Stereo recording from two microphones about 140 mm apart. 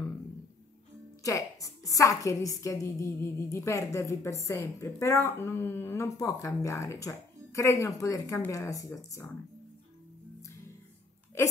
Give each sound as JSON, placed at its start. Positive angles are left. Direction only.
{"t": 1.2, "sound": "a woman's voice", "side_deg": 25}